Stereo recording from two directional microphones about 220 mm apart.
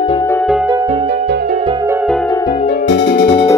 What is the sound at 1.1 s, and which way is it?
Music, 45° right (ahead or behind).